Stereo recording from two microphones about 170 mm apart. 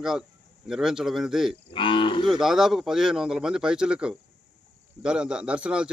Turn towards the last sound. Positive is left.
turn(degrees=-5)  # may be behind; listen again after turning